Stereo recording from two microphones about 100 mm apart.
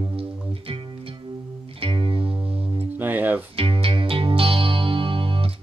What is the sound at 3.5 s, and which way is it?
Music, 65° right (ahead or behind).